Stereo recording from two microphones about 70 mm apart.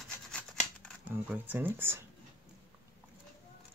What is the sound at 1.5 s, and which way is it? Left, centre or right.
Speech, right.